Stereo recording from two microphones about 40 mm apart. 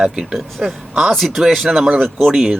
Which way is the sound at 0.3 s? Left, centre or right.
Centre.